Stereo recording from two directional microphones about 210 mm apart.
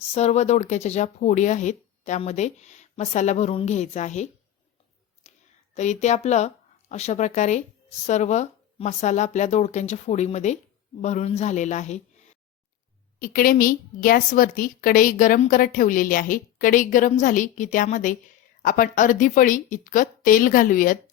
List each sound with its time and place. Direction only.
0.1 s a woman's voice: 30° left (ahead or behind)
5.2 s a sound: 30° left (ahead or behind)
5.7 s a woman's voice: 35° left (ahead or behind)
13.1 s a woman's voice: 40° left (ahead or behind)